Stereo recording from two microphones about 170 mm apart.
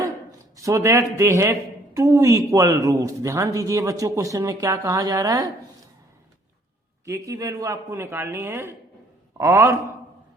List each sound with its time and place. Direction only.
0.0 s a man's voice: 20° right (ahead or behind)
7.0 s a man's voice: 20° right (ahead or behind)